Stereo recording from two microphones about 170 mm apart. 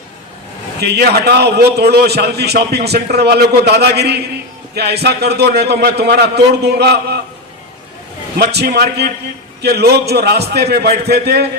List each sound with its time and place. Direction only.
0.8 s a man's voice: 70° right (ahead or behind)
8.4 s a man's voice: 70° right (ahead or behind)